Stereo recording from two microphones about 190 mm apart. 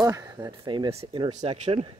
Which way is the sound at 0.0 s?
20° right (ahead or behind).